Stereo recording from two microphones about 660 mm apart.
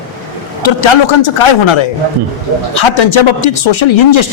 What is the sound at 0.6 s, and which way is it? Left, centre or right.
Speech, left.